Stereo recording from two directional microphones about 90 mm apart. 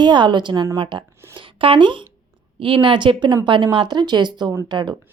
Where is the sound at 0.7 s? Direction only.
65° right (ahead or behind).